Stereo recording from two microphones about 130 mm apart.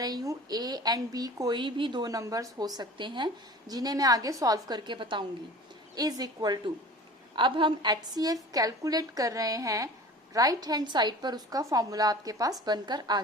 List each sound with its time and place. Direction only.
0.0 s a woman's voice: 30° right (ahead or behind)